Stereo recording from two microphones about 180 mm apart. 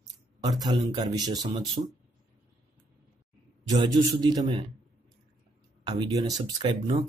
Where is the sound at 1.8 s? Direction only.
40° right (ahead or behind).